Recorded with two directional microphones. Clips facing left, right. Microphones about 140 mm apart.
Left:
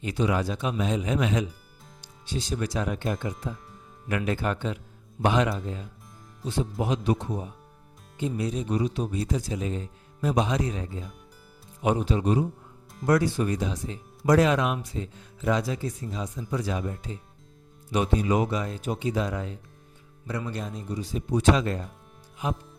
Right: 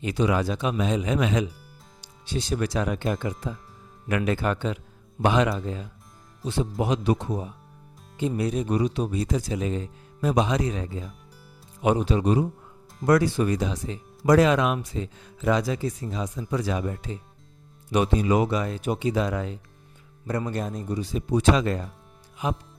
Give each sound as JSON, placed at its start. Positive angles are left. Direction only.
{"t": 0.0, "sound": "speech", "side_deg": -90}
{"t": 2.0, "sound": "speech", "side_deg": -70}
{"t": 4.1, "sound": "speech", "side_deg": -90}
{"t": 6.7, "sound": "speech", "side_deg": -85}
{"t": 8.2, "sound": "speech", "side_deg": -65}
{"t": 17.9, "sound": "speech", "side_deg": -80}
{"t": 20.2, "sound": "a man's voice", "side_deg": -45}
{"t": 21.1, "sound": "speech", "side_deg": -90}
{"t": 22.4, "sound": "music", "side_deg": -90}